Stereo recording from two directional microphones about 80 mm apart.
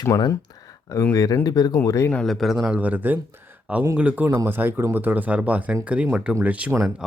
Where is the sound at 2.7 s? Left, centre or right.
Right.